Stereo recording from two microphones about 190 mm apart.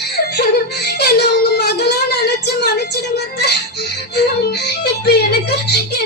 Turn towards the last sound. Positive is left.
turn(degrees=60)  # may be behind; listen again after turning